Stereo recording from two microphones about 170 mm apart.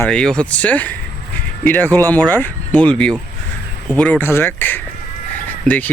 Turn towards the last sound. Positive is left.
turn(degrees=10)  # may be behind; listen again after turning